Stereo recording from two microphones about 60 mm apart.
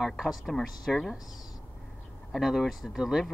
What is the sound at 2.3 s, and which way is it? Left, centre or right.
Speech, centre.